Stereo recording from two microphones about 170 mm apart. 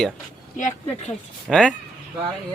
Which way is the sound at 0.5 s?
45° left (ahead or behind).